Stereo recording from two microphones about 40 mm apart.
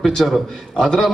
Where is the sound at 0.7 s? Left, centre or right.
Centre.